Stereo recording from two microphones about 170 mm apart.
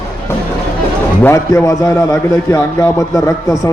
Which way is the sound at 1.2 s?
15° left (ahead or behind).